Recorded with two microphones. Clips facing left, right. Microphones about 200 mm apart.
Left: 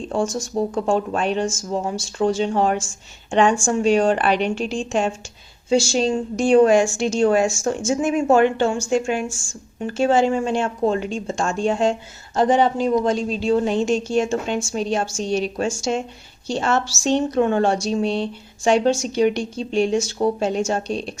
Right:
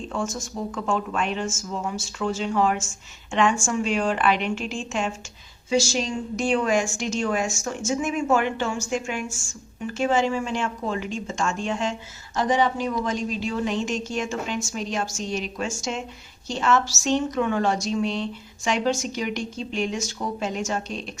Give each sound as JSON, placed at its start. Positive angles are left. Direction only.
{"t": 0.1, "sound": "a woman's voice", "side_deg": 30}